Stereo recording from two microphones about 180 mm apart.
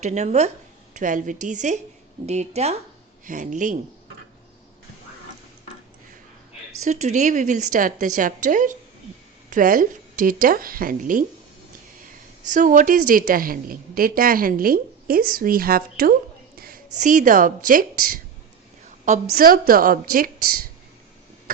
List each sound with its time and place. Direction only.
0.0 s a woman's voice: 40° right (ahead or behind)
6.8 s a woman's voice: 40° right (ahead or behind)
12.5 s a woman's voice: 45° right (ahead or behind)